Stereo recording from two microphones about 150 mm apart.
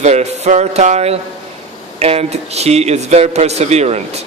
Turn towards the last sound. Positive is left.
turn(degrees=-45)  # may be behind; listen again after turning